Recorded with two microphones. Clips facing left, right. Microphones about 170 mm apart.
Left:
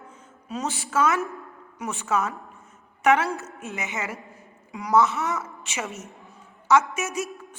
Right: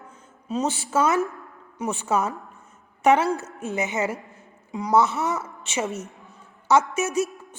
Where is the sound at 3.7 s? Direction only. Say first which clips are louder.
Right 7 dB; 30° right (ahead or behind).